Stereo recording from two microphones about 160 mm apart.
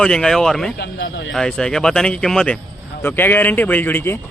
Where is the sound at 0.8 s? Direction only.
90° left.